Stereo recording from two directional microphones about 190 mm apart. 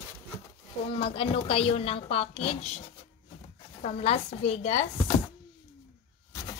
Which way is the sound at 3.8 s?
30° left (ahead or behind).